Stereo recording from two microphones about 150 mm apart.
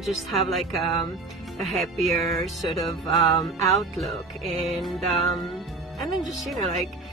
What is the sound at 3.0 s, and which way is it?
Music, 25° left (ahead or behind).